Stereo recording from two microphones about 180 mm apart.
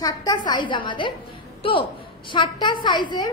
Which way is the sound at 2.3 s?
25° left (ahead or behind).